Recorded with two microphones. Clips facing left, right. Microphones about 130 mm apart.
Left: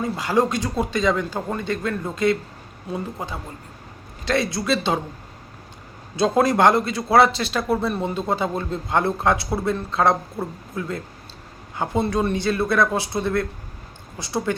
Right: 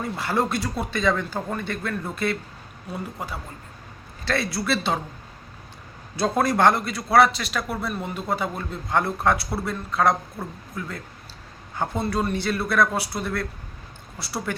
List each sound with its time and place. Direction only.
0.2 s a man's voice: 15° left (ahead or behind)
6.1 s a man's voice: 20° left (ahead or behind)